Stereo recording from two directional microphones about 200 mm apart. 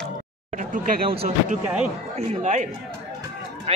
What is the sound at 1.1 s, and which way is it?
Mantra, 30° right (ahead or behind).